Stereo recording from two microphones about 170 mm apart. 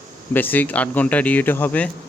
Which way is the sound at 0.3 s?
10° left (ahead or behind).